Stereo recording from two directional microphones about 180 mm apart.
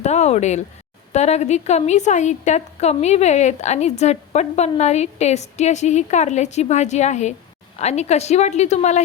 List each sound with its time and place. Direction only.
0.0 s a woman's voice: 40° left (ahead or behind)